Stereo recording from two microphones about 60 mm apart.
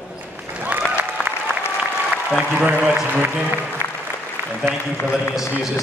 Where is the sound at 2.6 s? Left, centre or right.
Right.